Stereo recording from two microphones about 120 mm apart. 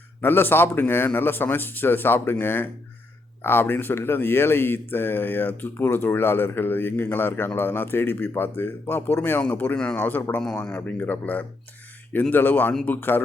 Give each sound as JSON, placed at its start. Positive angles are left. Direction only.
{"t": 0.2, "sound": "speech", "side_deg": 15}